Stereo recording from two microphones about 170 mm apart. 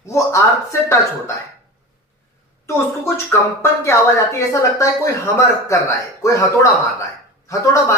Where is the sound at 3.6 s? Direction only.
15° left (ahead or behind).